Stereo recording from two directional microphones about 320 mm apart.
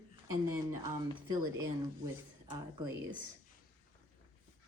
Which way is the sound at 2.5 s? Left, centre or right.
Centre.